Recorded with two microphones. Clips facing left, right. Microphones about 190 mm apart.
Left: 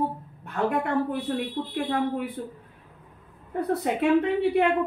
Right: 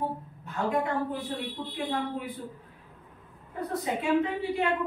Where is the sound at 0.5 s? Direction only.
60° left (ahead or behind).